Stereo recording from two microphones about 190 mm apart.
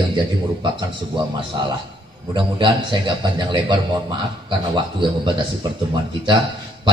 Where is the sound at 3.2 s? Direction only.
25° right (ahead or behind).